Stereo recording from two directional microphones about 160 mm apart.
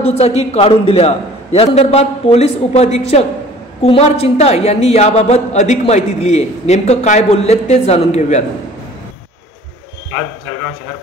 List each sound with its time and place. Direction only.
0.0 s a man's voice: 40° left (ahead or behind)